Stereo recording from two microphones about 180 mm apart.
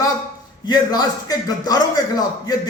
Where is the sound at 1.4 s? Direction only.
20° left (ahead or behind).